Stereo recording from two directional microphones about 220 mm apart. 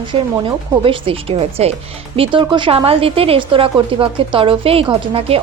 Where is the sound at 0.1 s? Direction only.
25° right (ahead or behind).